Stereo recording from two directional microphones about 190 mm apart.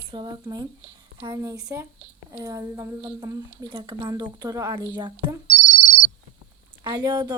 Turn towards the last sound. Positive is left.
turn(degrees=-20)  # may be behind; listen again after turning